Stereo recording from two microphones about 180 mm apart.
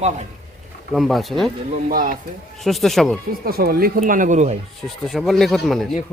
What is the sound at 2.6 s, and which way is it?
Speech, centre (ahead or behind).